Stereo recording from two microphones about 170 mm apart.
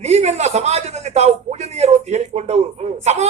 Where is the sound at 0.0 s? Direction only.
40° right (ahead or behind).